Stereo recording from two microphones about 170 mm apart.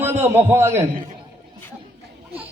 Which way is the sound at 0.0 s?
15° right (ahead or behind).